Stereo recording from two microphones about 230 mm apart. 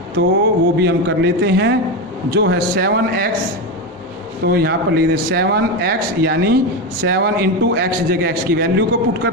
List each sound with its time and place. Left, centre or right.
0.8 s a man's voice: right
4.4 s a man's voice: right